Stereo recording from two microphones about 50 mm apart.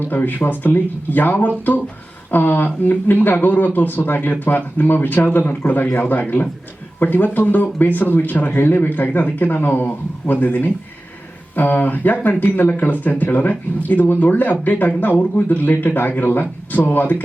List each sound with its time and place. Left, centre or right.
0.0 s speech: left